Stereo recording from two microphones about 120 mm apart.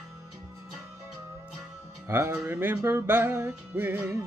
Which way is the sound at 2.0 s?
20° right (ahead or behind).